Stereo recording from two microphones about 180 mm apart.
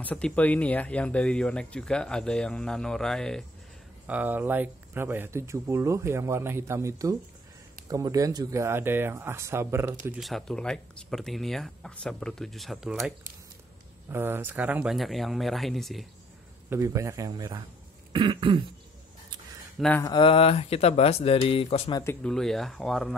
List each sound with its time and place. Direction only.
0.0 s speech: 10° left (ahead or behind)
4.1 s speech: 10° right (ahead or behind)
10.0 s speech: centre (ahead or behind)
14.1 s speech: 10° right (ahead or behind)
16.6 s speech: 15° right (ahead or behind)
18.1 s throat clearing: 25° right (ahead or behind)
19.8 s speech: 10° left (ahead or behind)
20.1 s speech: 30° left (ahead or behind)
22.0 s speech: 5° left (ahead or behind)